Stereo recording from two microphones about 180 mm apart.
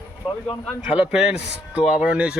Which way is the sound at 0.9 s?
5° right (ahead or behind).